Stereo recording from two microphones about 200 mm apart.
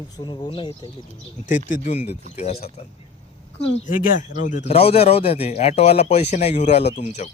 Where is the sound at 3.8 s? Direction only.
40° left (ahead or behind).